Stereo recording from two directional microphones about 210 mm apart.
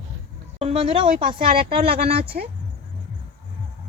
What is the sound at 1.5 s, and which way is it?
A woman's voice, 45° right (ahead or behind).